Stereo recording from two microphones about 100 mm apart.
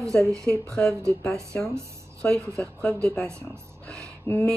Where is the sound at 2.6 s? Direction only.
15° left (ahead or behind).